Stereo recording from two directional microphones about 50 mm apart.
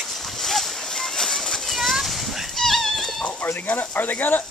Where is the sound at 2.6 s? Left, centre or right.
Centre.